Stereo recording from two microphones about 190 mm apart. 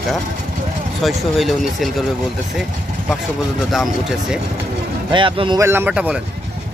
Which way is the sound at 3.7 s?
Centre (ahead or behind).